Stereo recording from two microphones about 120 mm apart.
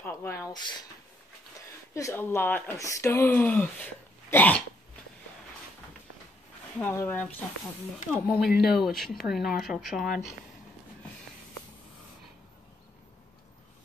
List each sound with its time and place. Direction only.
0.0 s speech: 20° left (ahead or behind)
0.5 s speech: 35° left (ahead or behind)
2.0 s speech: 20° left (ahead or behind)
6.8 s speech: 15° left (ahead or behind)
8.3 s speech: centre (ahead or behind)